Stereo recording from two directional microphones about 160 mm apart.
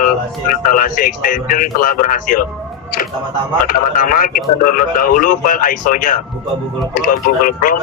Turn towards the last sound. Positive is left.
turn(degrees=65)  # may be behind; listen again after turning